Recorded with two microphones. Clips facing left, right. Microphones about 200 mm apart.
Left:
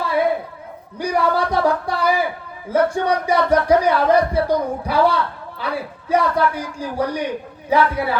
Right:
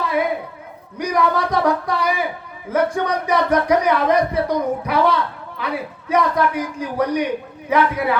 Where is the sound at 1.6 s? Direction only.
30° left (ahead or behind).